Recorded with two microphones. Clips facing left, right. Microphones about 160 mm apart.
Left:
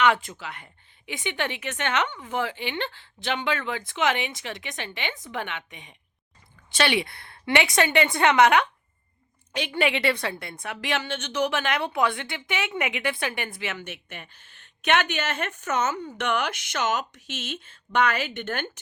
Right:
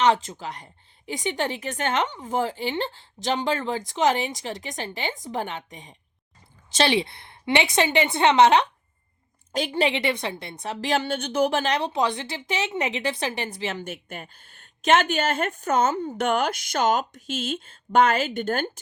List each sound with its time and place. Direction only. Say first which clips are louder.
0.0 s a woman's voice: right 2 dB; 35° right (ahead or behind)
9.5 s a woman's voice: right 2 dB; 40° right (ahead or behind)